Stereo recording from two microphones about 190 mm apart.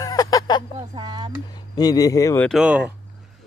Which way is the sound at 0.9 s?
25° right (ahead or behind).